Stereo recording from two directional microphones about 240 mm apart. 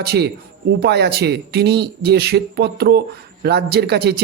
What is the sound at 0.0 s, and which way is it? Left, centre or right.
A man's voice, right.